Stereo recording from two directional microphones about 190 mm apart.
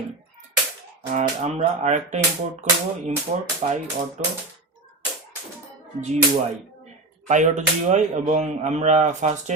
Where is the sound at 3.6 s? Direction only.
40° right (ahead or behind).